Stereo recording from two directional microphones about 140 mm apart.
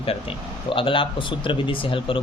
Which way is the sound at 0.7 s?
40° left (ahead or behind).